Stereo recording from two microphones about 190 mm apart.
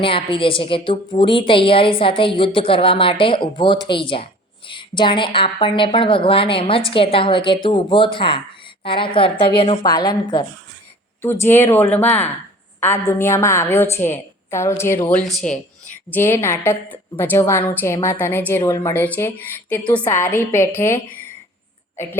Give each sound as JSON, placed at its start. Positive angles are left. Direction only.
{"t": 0.0, "sound": "a woman's voice", "side_deg": 30}
{"t": 16.0, "sound": "a woman's voice", "side_deg": 10}